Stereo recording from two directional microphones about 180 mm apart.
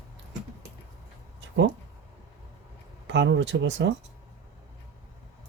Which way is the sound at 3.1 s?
80° right.